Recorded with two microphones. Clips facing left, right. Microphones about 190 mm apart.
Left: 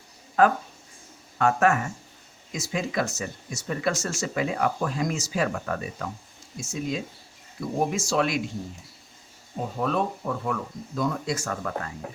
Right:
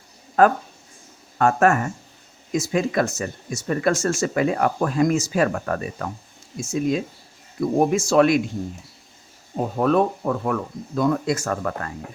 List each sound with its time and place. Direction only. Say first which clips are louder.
0.4 s speech: right 4 dB; 50° right (ahead or behind)
9.7 s speech: right 7 dB; 55° right (ahead or behind)